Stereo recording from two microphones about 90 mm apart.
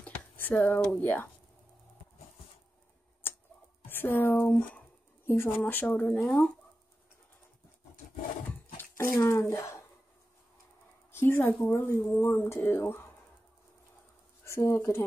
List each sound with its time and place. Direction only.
0.0 s speech: 20° left (ahead or behind)
3.2 s tick-tock: 25° left (ahead or behind)
3.8 s speech: 25° left (ahead or behind)
5.2 s speech: 25° left (ahead or behind)
8.7 s a sound: 25° left (ahead or behind)
9.2 s speech: 30° left (ahead or behind)
11.1 s a woman's voice: 25° left (ahead or behind)
14.4 s speech: 30° left (ahead or behind)